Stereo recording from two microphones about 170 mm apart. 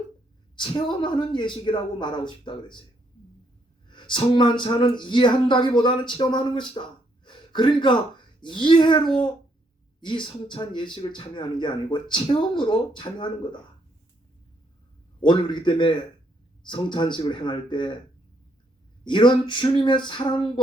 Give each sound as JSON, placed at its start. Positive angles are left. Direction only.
{"t": 0.5, "sound": "speech", "side_deg": 30}
{"t": 4.1, "sound": "speech", "side_deg": 30}
{"t": 10.0, "sound": "speech", "side_deg": 30}
{"t": 15.2, "sound": "speech", "side_deg": 30}
{"t": 19.0, "sound": "speech", "side_deg": 30}